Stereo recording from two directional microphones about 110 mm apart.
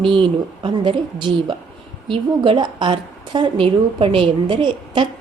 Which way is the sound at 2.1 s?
50° right (ahead or behind).